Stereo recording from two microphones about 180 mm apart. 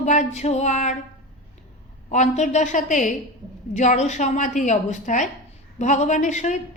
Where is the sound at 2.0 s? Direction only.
40° left (ahead or behind).